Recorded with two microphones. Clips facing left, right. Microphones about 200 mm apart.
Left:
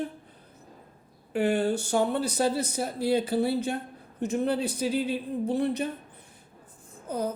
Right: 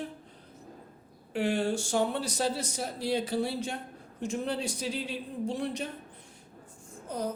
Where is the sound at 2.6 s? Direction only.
60° left (ahead or behind).